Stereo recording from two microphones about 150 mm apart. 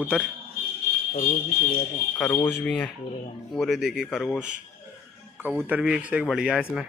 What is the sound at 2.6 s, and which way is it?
Speech, 5° left (ahead or behind).